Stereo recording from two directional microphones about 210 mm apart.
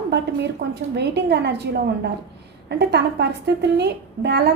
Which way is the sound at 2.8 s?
50° right (ahead or behind).